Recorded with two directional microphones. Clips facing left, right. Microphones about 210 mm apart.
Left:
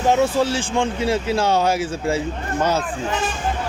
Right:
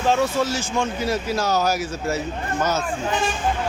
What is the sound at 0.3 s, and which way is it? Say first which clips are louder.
Speech: left 3 dB; 30° left (ahead or behind).